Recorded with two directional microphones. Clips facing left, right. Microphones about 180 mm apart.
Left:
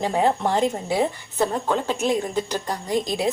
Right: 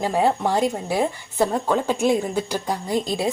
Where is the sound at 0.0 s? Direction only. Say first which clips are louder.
Right 1 dB; 10° right (ahead or behind).